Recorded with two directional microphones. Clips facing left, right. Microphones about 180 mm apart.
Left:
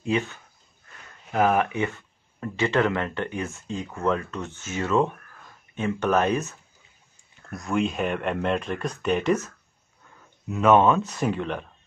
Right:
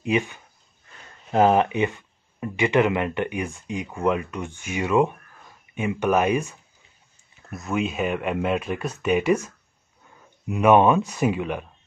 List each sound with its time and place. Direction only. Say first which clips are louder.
0.0 s speech: right 2 dB; 15° right (ahead or behind)
1.3 s speech: right 4 dB; 25° right (ahead or behind); by 9.5 s 10° right (ahead or behind)
10.5 s speech: right 2 dB; 15° right (ahead or behind)